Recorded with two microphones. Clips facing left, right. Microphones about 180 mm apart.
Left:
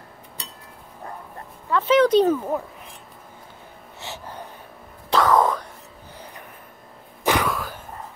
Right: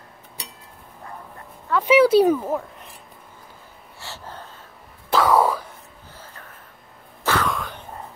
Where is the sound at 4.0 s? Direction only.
15° left (ahead or behind).